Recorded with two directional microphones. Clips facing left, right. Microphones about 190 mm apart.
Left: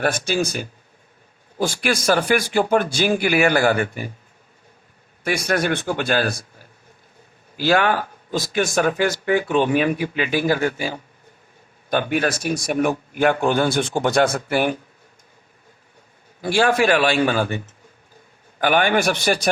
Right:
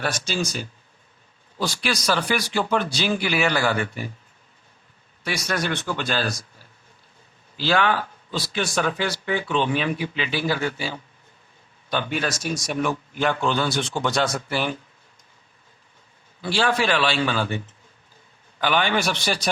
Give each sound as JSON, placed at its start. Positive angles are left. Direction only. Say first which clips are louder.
{"t": 0.0, "sound": "speech", "louder": "left 5 dB", "side_deg": 55}
{"t": 5.2, "sound": "speech", "louder": "left 5 dB", "side_deg": 50}
{"t": 16.4, "sound": "speech", "louder": "left 5 dB", "side_deg": 45}
{"t": 18.6, "sound": "speech", "louder": "left 4 dB", "side_deg": 50}